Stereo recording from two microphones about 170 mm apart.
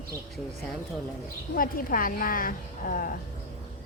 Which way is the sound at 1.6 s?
55° left (ahead or behind).